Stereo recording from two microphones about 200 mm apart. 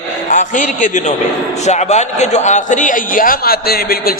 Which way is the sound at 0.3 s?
40° left (ahead or behind).